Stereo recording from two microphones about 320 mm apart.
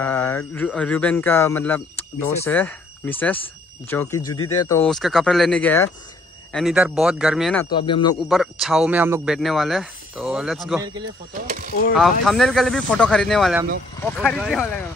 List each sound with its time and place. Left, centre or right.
0.0 s speech: centre
7.7 s a man's voice: centre
8.2 s speech: centre
11.3 s a sound: right
11.9 s speech: centre